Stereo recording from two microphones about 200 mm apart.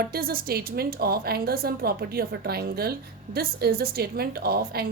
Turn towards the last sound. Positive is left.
turn(degrees=-50)  # may be behind; listen again after turning